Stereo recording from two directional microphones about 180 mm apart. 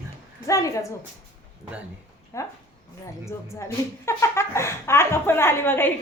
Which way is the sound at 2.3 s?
15° left (ahead or behind).